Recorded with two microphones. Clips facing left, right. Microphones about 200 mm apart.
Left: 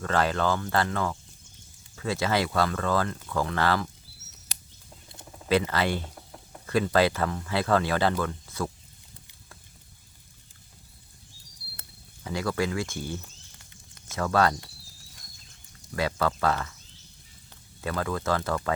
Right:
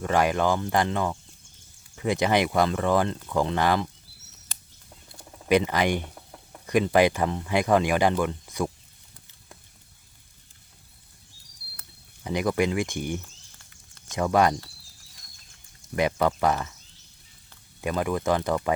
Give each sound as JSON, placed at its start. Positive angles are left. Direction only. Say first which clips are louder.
{"t": 0.0, "sound": "speech", "louder": "right 3 dB", "side_deg": -15}
{"t": 5.5, "sound": "speech", "louder": "right 3 dB", "side_deg": -15}
{"t": 12.2, "sound": "speech", "louder": "right 4 dB", "side_deg": -20}
{"t": 15.9, "sound": "speech", "louder": "right 4 dB", "side_deg": -20}
{"t": 17.7, "sound": "speech", "louder": "right 4 dB", "side_deg": -15}